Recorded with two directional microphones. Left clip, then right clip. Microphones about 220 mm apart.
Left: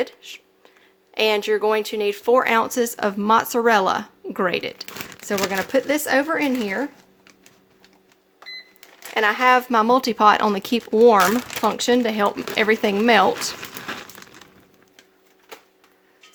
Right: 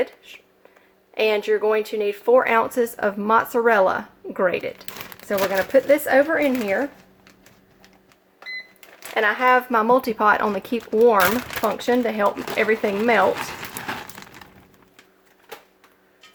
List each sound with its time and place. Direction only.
1.1 s speech: 55° left (ahead or behind)
9.1 s speech: 55° left (ahead or behind)
13.7 s crumpling: centre (ahead or behind)